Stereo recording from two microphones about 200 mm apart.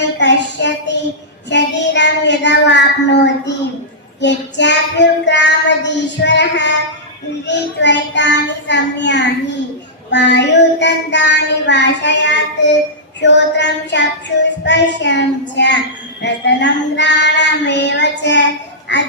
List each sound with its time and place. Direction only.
0.2 s child singing: 60° left (ahead or behind)
1.5 s a sound: 60° left (ahead or behind)
4.2 s child singing: 60° left (ahead or behind)